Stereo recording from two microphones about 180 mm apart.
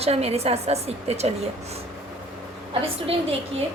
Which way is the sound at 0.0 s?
35° right (ahead or behind).